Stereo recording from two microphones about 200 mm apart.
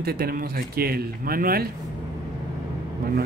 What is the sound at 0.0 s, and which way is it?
Speech, 50° right (ahead or behind).